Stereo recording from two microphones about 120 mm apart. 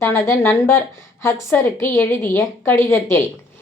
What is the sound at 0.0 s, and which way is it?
A woman's voice, 20° left (ahead or behind).